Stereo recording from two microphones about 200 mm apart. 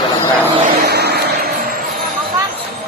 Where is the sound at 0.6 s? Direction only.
45° right (ahead or behind).